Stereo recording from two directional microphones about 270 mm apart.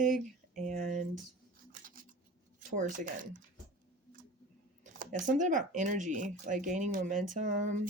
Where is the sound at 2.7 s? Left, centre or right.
Right.